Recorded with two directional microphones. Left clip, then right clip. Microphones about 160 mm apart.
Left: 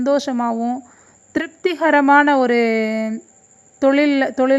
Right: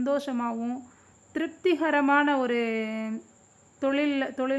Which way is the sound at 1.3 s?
35° left (ahead or behind).